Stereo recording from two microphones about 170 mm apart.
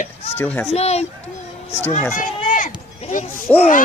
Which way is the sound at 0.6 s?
40° left (ahead or behind).